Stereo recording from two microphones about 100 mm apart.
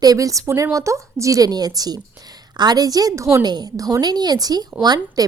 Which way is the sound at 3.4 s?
45° right (ahead or behind).